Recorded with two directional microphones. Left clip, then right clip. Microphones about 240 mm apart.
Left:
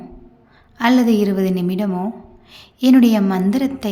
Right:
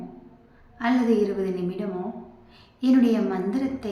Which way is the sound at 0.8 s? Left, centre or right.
Left.